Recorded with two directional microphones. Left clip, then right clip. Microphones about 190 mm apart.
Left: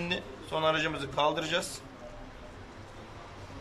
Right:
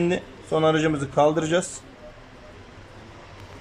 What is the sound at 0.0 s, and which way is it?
Speech, 40° right (ahead or behind).